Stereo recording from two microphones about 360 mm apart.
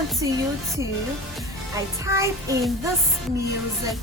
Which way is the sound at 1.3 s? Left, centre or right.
Centre.